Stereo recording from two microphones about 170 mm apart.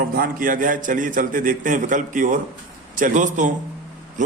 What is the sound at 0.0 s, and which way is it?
A man's voice, 55° right (ahead or behind).